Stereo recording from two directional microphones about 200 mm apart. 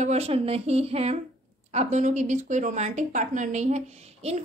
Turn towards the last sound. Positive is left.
turn(degrees=-35)  # may be behind; listen again after turning